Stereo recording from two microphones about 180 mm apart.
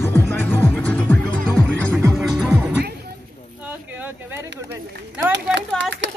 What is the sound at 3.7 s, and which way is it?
Run, 10° right (ahead or behind).